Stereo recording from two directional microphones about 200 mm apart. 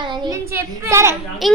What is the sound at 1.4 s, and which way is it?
Speech, centre (ahead or behind).